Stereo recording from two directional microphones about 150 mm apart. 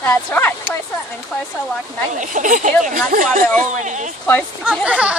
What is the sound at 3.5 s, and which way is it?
Speech, 55° right (ahead or behind).